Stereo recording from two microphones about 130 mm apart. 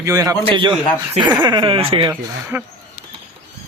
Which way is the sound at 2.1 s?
15° right (ahead or behind).